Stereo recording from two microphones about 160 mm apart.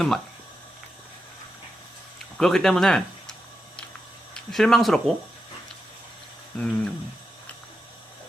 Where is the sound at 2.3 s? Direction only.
Centre (ahead or behind).